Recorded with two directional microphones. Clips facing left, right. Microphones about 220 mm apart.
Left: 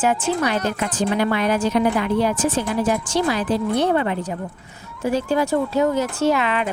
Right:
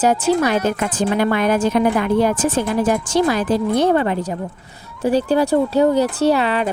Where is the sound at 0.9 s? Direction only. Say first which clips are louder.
Right 1 dB; 50° right (ahead or behind).